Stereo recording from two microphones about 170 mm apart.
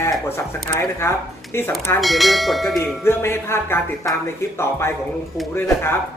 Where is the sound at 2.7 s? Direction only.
15° left (ahead or behind).